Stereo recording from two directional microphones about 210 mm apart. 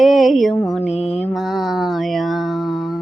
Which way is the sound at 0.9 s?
30° left (ahead or behind).